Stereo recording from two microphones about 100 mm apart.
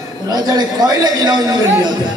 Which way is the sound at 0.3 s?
40° right (ahead or behind).